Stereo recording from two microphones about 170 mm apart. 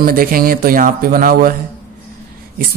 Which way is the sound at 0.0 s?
55° right (ahead or behind).